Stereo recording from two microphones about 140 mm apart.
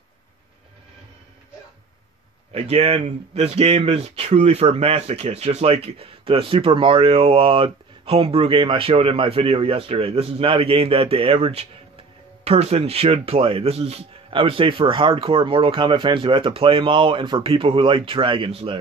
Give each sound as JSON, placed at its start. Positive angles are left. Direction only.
{"t": 2.5, "sound": "speech", "side_deg": -50}